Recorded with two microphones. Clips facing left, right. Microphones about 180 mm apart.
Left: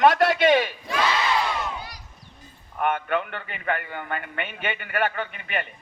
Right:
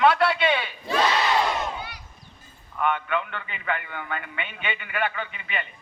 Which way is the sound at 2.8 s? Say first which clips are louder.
Left 1 dB; 50° left (ahead or behind).